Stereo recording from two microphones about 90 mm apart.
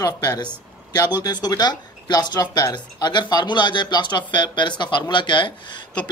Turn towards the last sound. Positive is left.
turn(degrees=60)  # may be behind; listen again after turning